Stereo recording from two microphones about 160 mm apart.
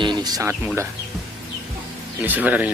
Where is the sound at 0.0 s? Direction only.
25° right (ahead or behind).